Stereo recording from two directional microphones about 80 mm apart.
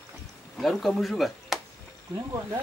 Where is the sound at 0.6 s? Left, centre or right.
Centre.